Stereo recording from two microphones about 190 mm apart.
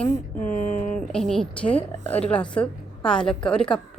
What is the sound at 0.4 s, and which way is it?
Speech, 45° left (ahead or behind).